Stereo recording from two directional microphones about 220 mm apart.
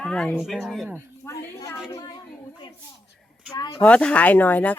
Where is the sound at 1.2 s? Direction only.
15° left (ahead or behind).